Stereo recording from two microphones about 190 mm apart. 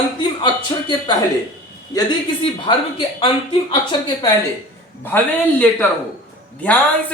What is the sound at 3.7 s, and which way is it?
Speech, 25° left (ahead or behind).